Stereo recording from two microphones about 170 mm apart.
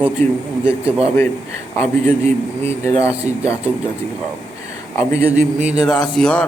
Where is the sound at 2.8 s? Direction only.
15° left (ahead or behind).